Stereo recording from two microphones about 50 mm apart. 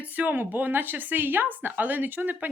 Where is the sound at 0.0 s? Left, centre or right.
Right.